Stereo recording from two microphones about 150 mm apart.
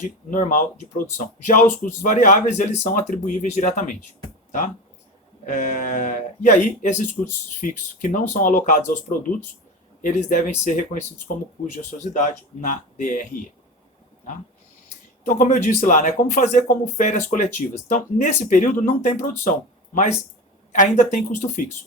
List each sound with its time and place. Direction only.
0.0 s speech: 60° left (ahead or behind)
5.5 s speech: 55° left (ahead or behind)
12.1 s speech: 55° left (ahead or behind)
15.3 s speech: 60° left (ahead or behind)